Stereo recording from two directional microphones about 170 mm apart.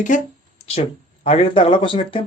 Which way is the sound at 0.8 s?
35° left (ahead or behind).